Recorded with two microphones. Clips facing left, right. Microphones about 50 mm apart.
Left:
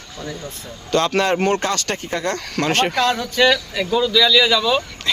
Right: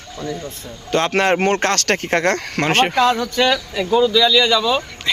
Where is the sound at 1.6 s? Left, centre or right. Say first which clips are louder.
Right 4 dB; right.